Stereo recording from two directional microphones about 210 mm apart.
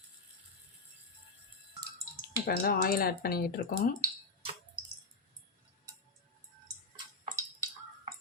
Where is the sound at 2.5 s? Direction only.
45° left (ahead or behind).